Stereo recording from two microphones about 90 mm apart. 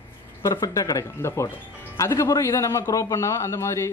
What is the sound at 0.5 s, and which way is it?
Speech, 45° left (ahead or behind).